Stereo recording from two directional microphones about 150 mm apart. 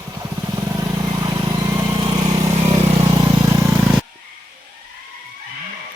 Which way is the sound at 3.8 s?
5° right (ahead or behind).